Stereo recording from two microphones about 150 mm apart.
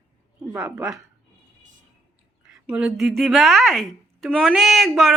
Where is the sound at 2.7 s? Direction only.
5° right (ahead or behind).